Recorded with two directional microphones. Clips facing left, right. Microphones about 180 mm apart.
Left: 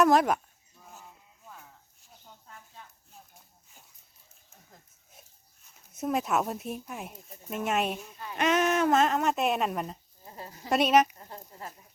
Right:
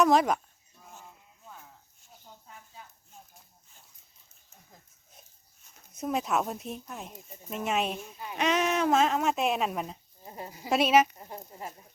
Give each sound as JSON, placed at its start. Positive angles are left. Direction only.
{"t": 0.0, "sound": "speech", "side_deg": 0}
{"t": 2.0, "sound": "snake", "side_deg": 0}
{"t": 5.9, "sound": "speech", "side_deg": 5}
{"t": 10.2, "sound": "speech", "side_deg": -15}
{"t": 10.7, "sound": "speech", "side_deg": 0}
{"t": 11.2, "sound": "speech", "side_deg": -15}